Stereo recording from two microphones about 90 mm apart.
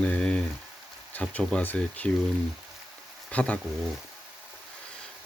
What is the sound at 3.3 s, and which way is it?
Speech, 15° left (ahead or behind).